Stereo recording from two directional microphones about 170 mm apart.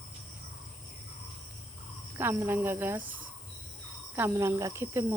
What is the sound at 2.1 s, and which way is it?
Speech, 15° right (ahead or behind).